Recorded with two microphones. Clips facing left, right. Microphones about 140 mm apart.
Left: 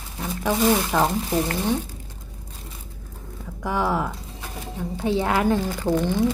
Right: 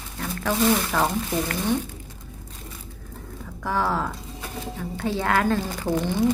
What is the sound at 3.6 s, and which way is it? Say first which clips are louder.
Speech: left 1 dB; 15° left (ahead or behind).